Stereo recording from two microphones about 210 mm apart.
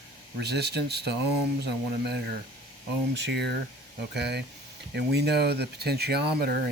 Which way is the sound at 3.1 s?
55° right (ahead or behind).